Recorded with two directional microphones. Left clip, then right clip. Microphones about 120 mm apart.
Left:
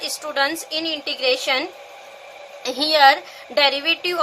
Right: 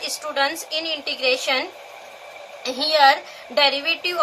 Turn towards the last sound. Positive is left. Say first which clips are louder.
# left 1 dB
turn(degrees=65)  # may be behind; listen again after turning